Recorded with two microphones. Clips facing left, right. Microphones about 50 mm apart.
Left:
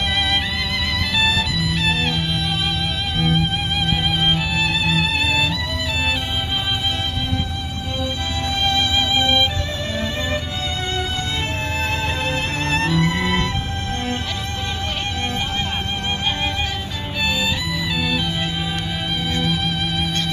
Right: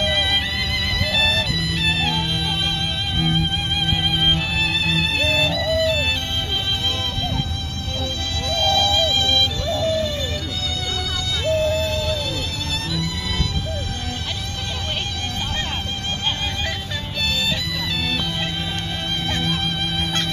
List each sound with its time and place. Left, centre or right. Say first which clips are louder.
1.1 s music: left 2 dB; centre
8.6 s music: right 2 dB; centre
11.4 s music: right 4 dB; left
18.0 s music: left 2 dB; centre